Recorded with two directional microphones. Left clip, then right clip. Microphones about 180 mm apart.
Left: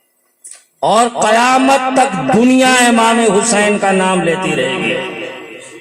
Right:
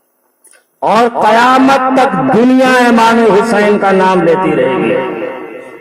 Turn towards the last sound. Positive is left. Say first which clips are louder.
# right 6 dB
turn(degrees=-25)  # may be behind; listen again after turning